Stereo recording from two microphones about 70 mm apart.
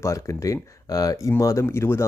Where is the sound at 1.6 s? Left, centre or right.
Left.